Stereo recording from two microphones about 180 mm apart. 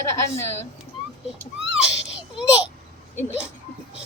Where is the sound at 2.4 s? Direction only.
5° right (ahead or behind).